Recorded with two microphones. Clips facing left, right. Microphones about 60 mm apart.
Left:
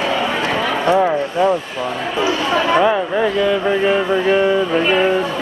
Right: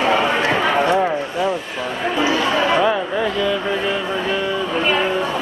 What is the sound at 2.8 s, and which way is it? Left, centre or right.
Speech, centre.